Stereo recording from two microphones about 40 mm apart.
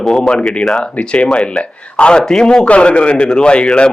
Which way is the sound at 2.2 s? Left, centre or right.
Centre.